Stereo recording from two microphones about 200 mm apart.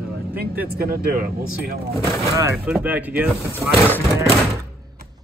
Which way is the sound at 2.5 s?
5° right (ahead or behind).